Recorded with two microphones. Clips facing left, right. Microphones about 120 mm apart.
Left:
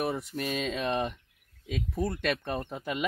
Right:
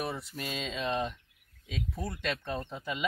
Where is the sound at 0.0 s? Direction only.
50° left (ahead or behind).